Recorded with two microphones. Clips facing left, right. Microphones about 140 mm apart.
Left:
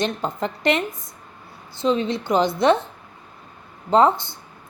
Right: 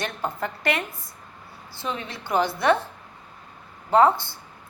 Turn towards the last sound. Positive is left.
turn(degrees=20)  # may be behind; listen again after turning